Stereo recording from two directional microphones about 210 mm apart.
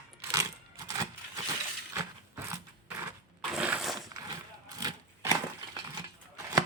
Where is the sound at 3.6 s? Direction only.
5° right (ahead or behind).